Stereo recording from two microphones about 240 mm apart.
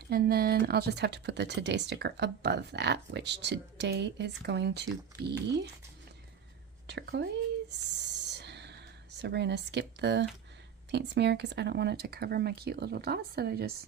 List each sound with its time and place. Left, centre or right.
0.1 s speech: right
6.8 s speech: right
7.9 s a sound: right
10.9 s speech: right